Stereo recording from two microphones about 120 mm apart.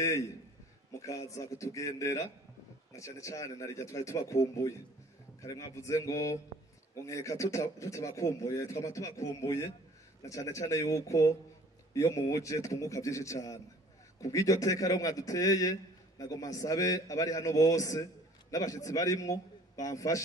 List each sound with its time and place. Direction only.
0.9 s a man's voice: 25° left (ahead or behind)